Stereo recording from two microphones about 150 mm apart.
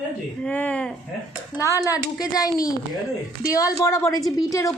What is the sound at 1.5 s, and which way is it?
Speech, 20° left (ahead or behind).